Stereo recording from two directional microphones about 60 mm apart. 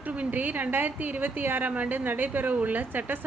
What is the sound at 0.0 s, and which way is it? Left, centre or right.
A woman's voice, right.